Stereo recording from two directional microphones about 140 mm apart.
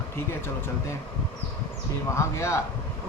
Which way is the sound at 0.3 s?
20° left (ahead or behind).